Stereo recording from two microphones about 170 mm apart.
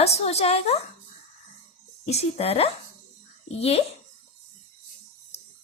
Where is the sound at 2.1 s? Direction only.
40° left (ahead or behind).